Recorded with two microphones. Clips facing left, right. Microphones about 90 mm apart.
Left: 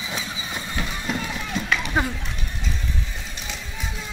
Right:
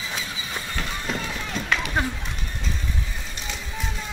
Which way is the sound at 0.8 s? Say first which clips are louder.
Left 2 dB; 10° left (ahead or behind).